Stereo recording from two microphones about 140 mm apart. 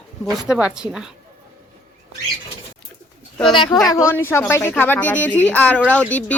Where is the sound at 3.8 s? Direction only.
20° left (ahead or behind).